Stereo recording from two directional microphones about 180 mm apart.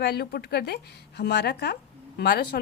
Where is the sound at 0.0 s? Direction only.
65° left (ahead or behind).